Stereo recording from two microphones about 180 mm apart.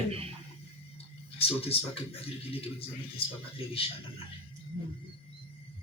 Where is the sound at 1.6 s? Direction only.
35° left (ahead or behind).